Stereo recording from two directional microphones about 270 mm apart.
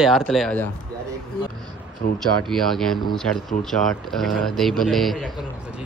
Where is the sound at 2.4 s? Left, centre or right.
Centre.